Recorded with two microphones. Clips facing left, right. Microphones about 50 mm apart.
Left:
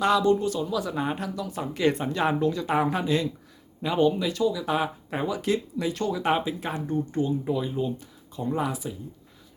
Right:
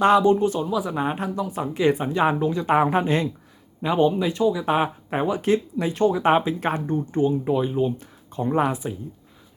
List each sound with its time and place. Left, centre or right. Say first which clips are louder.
0.0 s speech: right 5 dB; right
3.8 s speech: right 3 dB; right
6.6 s speech: right 4 dB; right
7.9 s speech: right 6 dB; right